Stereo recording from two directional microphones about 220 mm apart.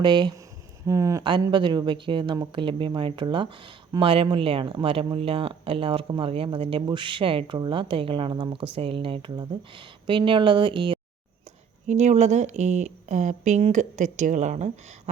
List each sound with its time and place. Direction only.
0.0 s a woman's voice: 20° right (ahead or behind)